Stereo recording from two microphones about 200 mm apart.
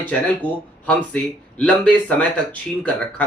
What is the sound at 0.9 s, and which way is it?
Speech, 5° left (ahead or behind).